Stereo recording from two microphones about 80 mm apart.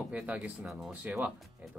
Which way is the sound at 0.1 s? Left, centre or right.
Centre.